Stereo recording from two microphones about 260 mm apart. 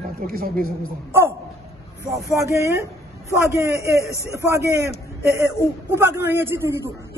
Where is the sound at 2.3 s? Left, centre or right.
Centre.